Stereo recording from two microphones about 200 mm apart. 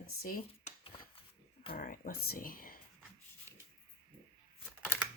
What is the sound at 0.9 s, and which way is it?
Shuffling cards, 25° left (ahead or behind).